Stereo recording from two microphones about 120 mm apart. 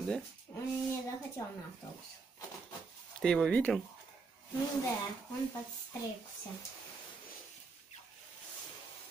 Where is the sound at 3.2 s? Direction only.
5° left (ahead or behind).